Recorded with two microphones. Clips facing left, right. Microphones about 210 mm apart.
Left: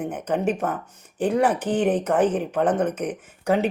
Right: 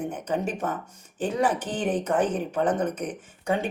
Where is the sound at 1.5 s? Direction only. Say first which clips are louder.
Left 5 dB; 10° left (ahead or behind).